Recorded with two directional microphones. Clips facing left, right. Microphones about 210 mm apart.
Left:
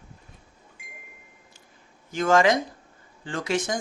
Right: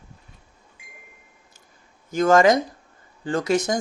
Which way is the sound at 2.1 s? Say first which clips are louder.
Right 4 dB; 40° right (ahead or behind).